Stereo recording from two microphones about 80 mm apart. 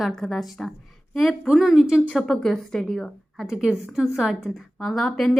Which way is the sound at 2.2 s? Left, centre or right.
Centre.